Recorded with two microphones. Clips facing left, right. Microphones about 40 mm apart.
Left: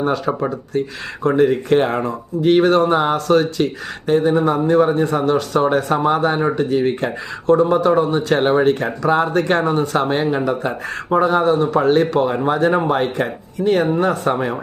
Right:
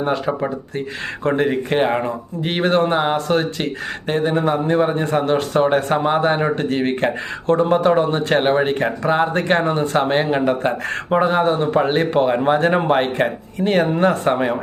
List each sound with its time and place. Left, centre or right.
1.2 s speech: right
1.7 s speech: right
6.4 s speech: right
8.4 s speech: right
9.3 s speech: right
14.3 s speech: right